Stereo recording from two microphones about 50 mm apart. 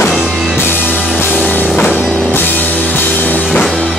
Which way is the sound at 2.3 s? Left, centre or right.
Left.